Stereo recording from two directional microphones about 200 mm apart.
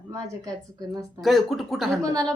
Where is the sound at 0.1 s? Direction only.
15° right (ahead or behind).